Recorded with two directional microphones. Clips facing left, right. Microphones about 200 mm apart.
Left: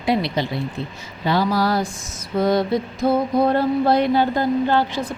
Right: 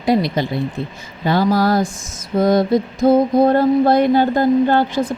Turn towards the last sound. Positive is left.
turn(degrees=-50)  # may be behind; listen again after turning